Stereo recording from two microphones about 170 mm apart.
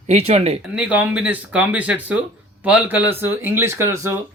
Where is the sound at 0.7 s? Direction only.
5° right (ahead or behind).